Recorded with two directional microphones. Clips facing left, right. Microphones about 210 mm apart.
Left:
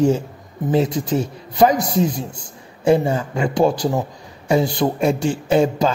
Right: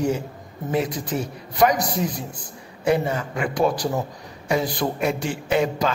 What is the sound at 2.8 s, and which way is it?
A man's voice, 30° left (ahead or behind).